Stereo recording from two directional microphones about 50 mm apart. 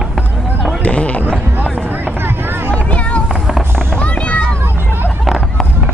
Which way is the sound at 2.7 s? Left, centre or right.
Left.